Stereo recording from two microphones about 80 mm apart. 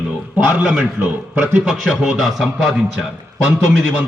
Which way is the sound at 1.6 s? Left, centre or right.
Centre.